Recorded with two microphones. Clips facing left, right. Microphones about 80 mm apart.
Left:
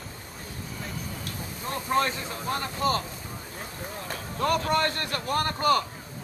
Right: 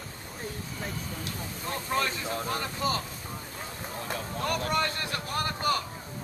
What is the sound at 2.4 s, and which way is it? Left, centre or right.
Speech, left.